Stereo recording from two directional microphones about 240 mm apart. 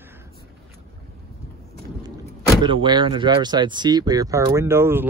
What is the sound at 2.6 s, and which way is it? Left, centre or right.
Speech, centre.